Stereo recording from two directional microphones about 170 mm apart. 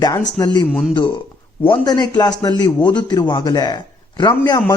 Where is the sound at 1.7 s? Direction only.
25° left (ahead or behind).